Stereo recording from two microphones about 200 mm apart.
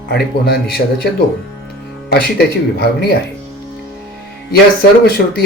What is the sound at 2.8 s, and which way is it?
Speech, 55° left (ahead or behind).